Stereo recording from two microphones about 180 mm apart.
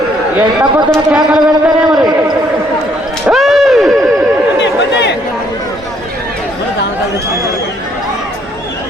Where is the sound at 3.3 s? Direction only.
Centre (ahead or behind).